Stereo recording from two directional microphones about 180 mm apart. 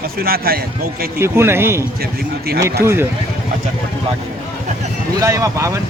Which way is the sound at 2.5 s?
55° right (ahead or behind).